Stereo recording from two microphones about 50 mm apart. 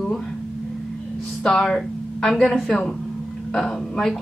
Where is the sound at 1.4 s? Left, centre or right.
Centre.